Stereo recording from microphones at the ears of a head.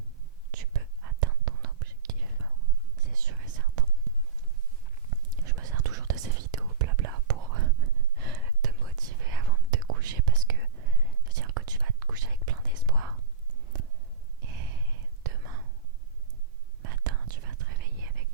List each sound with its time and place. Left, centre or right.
0.5 s whispering: right
16.8 s whispering: right